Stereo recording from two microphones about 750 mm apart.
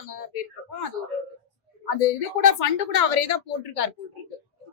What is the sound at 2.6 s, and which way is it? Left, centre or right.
Speech, left.